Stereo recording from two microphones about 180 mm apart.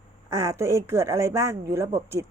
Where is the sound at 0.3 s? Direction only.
20° right (ahead or behind).